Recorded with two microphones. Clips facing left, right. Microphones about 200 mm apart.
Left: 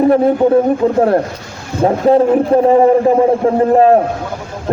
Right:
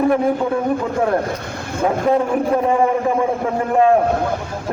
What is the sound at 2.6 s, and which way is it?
A man's voice, 35° left (ahead or behind).